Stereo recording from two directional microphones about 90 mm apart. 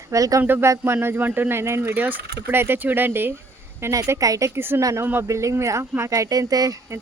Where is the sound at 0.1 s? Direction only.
40° right (ahead or behind).